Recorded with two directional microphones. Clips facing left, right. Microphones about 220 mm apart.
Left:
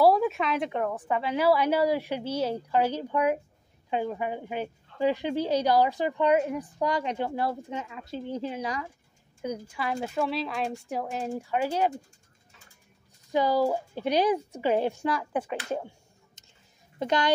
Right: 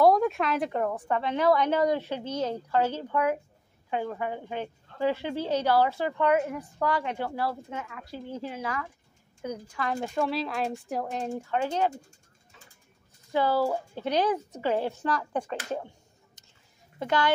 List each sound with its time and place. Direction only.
0.0 s a woman's voice: 5° left (ahead or behind)
13.3 s a woman's voice: 15° left (ahead or behind)
16.4 s a sound: 25° left (ahead or behind)
17.0 s speech: 20° left (ahead or behind)